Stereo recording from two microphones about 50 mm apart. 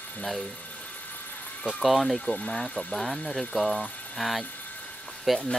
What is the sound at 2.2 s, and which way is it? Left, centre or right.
Speech, left.